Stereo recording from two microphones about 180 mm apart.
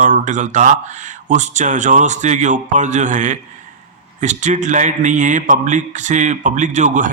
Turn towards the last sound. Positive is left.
turn(degrees=-45)  # may be behind; listen again after turning